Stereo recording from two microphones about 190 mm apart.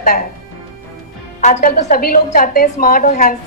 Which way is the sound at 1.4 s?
40° left (ahead or behind).